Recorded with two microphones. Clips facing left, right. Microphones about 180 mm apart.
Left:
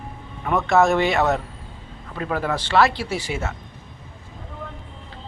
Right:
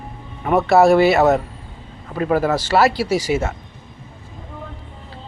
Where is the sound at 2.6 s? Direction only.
10° right (ahead or behind).